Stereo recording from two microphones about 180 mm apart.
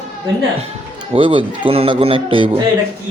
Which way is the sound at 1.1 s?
30° right (ahead or behind).